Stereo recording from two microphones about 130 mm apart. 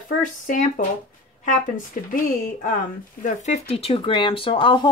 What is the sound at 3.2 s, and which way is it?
Speech, 65° left (ahead or behind).